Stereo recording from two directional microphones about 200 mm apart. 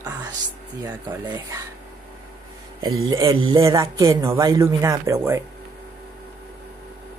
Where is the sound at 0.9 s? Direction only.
20° right (ahead or behind).